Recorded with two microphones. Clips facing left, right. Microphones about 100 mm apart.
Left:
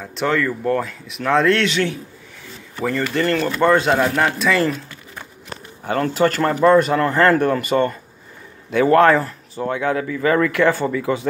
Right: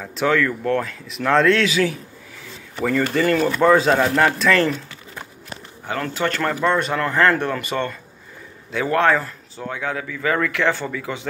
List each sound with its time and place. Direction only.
0.0 s speech: centre (ahead or behind)
5.9 s speech: 40° left (ahead or behind)
8.7 s speech: 45° left (ahead or behind)
10.0 s speech: 35° left (ahead or behind)